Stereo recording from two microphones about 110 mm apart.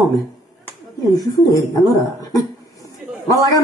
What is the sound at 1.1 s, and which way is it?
Speech, 35° left (ahead or behind).